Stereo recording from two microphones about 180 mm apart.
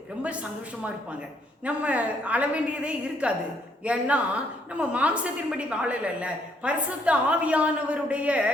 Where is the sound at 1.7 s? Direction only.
5° right (ahead or behind).